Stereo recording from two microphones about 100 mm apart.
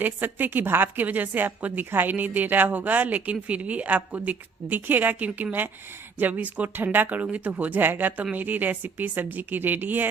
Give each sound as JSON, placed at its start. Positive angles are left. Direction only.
{"t": 0.0, "sound": "speech", "side_deg": -20}